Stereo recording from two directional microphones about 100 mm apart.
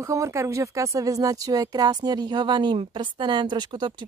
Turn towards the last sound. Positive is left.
turn(degrees=-50)  # may be behind; listen again after turning